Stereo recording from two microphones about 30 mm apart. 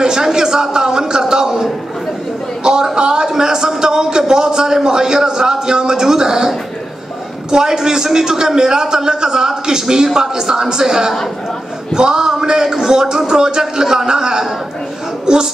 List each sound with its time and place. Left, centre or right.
0.0 s a sound: right
4.3 s a man's voice: right
7.5 s a man's voice: right